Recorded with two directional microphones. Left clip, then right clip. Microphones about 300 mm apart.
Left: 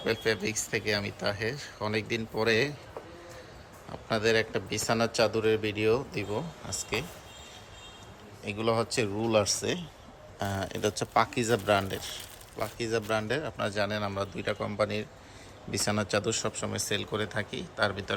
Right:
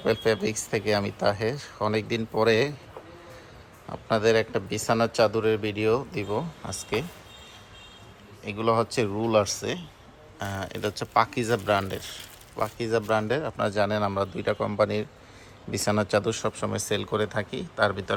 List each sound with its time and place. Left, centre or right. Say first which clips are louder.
0.0 s speech: right 5 dB; centre
3.8 s speech: right 5 dB; centre
8.4 s speech: right 4 dB; centre